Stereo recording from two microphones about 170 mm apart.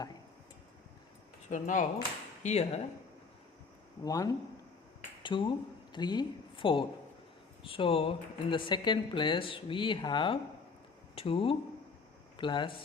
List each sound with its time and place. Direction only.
1.5 s speech: 50° left (ahead or behind)
4.0 s speech: 20° left (ahead or behind)